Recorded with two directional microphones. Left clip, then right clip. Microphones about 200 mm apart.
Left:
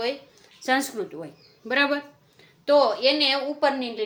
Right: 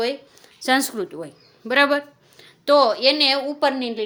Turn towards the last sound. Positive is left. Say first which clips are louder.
# right 2 dB
turn(degrees=-55)  # may be behind; listen again after turning